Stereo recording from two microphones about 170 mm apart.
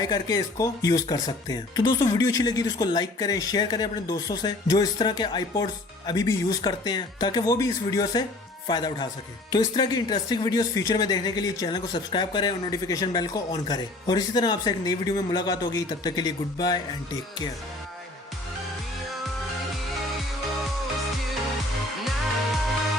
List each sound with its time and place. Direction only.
0.0 s speech: 25° left (ahead or behind)